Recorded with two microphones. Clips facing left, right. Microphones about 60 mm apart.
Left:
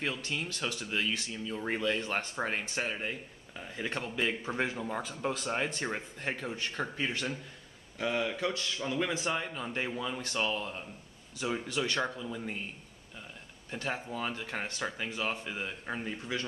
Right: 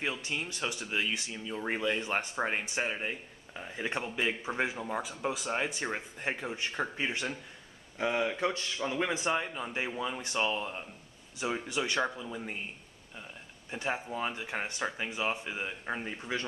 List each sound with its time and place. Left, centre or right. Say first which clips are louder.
0.0 s speech: even; centre
13.7 s speech: right 2 dB; centre